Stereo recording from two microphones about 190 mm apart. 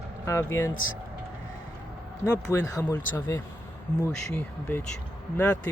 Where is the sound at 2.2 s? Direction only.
15° left (ahead or behind).